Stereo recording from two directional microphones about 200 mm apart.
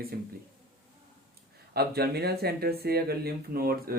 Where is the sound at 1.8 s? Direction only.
55° right (ahead or behind).